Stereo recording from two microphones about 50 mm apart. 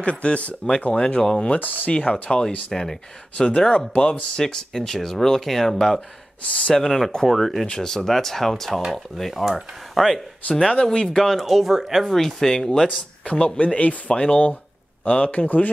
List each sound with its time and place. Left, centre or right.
0.0 s speech: left
0.9 s speech: centre
1.6 s speech: left
1.9 s speech: centre
10.5 s speech: centre
11.1 s speech: centre; by 15.7 s left